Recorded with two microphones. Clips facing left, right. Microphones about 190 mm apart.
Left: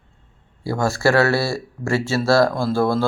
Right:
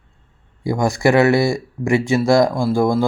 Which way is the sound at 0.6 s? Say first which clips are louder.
Right 3 dB; 15° right (ahead or behind).